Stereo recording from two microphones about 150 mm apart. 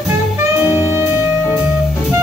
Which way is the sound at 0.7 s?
15° right (ahead or behind).